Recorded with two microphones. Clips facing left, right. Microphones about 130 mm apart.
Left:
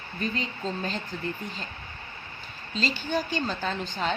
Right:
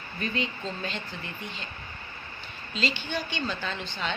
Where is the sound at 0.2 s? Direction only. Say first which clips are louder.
Even; 40° left (ahead or behind).